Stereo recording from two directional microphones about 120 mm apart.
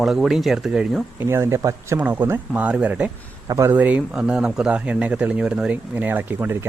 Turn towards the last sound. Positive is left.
turn(degrees=-20)  # may be behind; listen again after turning